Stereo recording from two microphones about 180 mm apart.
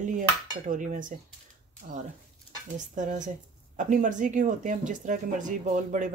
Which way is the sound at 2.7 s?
45° right (ahead or behind).